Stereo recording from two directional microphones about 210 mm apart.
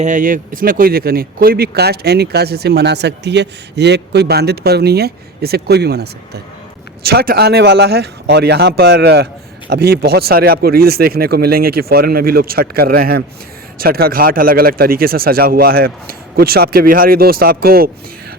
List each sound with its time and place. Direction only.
0.0 s speech: 35° right (ahead or behind)